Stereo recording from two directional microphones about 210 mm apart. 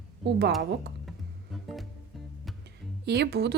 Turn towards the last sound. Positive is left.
turn(degrees=-50)  # may be behind; listen again after turning